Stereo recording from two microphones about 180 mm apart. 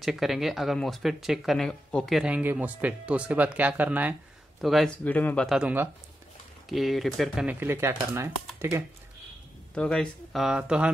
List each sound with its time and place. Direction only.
0.0 s speech: centre (ahead or behind)
7.6 s speech: 15° right (ahead or behind)
9.8 s speech: 5° left (ahead or behind)